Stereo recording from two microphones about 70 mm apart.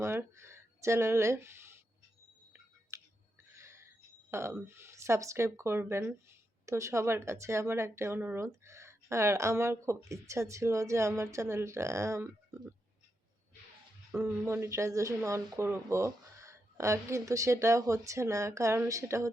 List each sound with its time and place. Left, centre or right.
0.0 s speech: right
2.9 s a sound: right
4.3 s speech: right
6.7 s a woman's voice: right
14.1 s speech: centre
14.4 s a woman's voice: right